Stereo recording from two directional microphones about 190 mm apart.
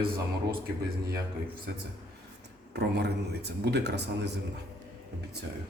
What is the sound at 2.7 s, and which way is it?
A man's voice, 60° right (ahead or behind).